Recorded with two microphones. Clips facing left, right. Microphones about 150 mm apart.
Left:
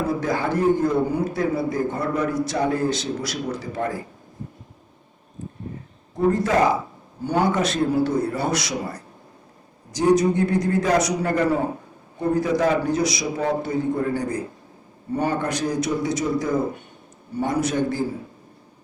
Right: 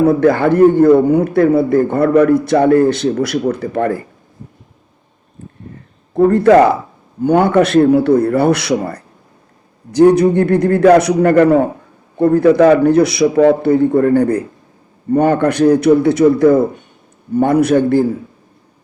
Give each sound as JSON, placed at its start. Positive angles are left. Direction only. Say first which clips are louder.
{"t": 0.0, "sound": "a man's voice", "louder": "right 12 dB", "side_deg": -60}
{"t": 5.4, "sound": "a sound", "louder": "even", "side_deg": -60}
{"t": 6.1, "sound": "a man's voice", "louder": "right 11 dB", "side_deg": -60}